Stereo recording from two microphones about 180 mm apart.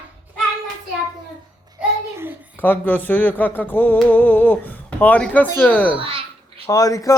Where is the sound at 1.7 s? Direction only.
10° right (ahead or behind).